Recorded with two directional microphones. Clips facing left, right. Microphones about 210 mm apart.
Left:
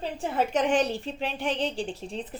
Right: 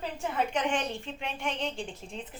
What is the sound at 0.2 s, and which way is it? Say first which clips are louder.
A woman's voice: left 4 dB; 35° left (ahead or behind).